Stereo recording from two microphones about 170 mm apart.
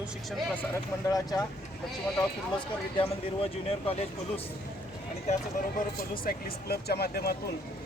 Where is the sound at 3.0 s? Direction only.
35° left (ahead or behind).